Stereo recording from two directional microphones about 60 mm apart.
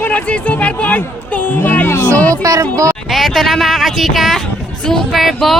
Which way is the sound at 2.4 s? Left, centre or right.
Right.